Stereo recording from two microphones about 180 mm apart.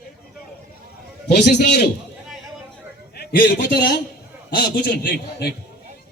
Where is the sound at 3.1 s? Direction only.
65° left (ahead or behind).